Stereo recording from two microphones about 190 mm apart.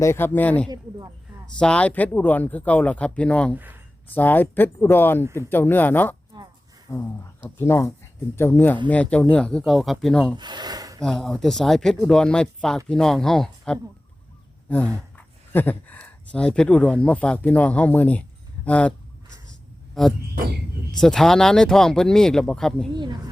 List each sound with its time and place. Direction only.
0.0 s speech: 15° left (ahead or behind)
0.7 s a sound: 20° right (ahead or behind)
1.5 s speech: 5° left (ahead or behind)
3.5 s speech: 10° right (ahead or behind)
4.1 s speech: 10° left (ahead or behind)
10.3 s speech: 25° right (ahead or behind)
11.0 s speech: centre (ahead or behind)
20.0 s speech: centre (ahead or behind)